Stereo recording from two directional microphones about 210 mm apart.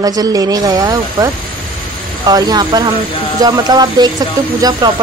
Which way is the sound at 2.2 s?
20° right (ahead or behind).